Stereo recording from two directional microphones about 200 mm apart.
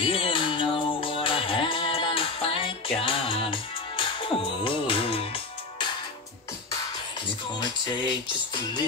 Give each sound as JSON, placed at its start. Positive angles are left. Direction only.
{"t": 0.0, "sound": "music", "side_deg": 25}
{"t": 7.6, "sound": "music", "side_deg": 20}